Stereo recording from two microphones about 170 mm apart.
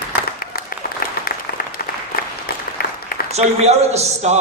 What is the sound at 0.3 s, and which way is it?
Applause, 60° left (ahead or behind).